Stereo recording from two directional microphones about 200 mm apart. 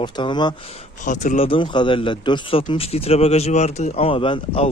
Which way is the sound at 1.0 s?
40° left (ahead or behind).